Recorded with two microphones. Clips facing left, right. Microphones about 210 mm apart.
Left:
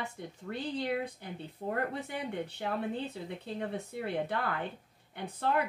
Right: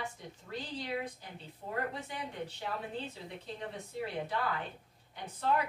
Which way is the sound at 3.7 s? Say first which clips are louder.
Left 4 dB; 60° left (ahead or behind).